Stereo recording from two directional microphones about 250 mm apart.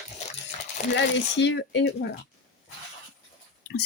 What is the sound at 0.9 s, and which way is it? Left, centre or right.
Speech, left.